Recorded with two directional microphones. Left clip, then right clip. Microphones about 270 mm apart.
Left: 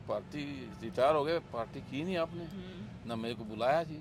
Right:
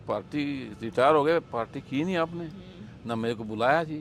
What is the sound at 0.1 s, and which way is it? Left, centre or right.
A man's voice, right.